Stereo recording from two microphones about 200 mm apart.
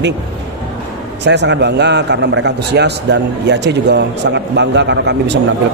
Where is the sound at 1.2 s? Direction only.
60° right (ahead or behind).